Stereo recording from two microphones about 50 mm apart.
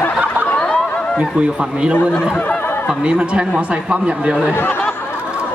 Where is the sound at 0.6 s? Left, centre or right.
Centre.